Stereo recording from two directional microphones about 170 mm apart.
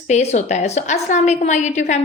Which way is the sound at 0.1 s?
40° left (ahead or behind).